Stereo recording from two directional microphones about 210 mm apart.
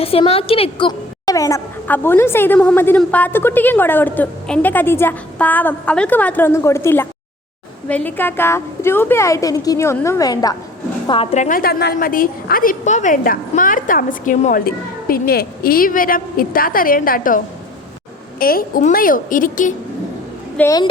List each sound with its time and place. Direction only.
0.0 s a woman's voice: 25° left (ahead or behind)
20.6 s a woman's voice: 15° left (ahead or behind)